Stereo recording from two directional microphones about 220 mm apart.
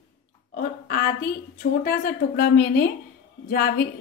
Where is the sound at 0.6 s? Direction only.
40° left (ahead or behind).